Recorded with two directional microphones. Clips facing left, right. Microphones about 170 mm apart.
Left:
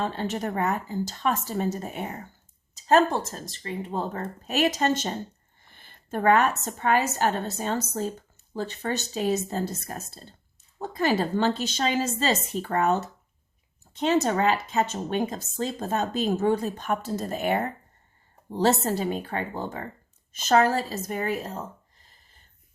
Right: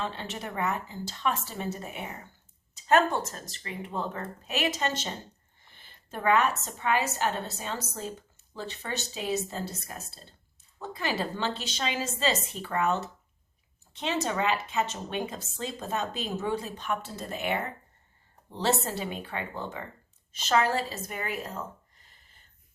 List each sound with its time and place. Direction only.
0.0 s a woman's voice: 45° left (ahead or behind)